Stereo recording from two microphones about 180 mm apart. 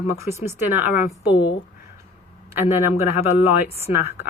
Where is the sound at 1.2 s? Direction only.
25° left (ahead or behind).